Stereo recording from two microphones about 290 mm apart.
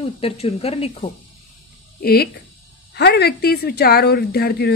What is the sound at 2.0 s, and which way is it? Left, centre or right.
A woman's voice, left.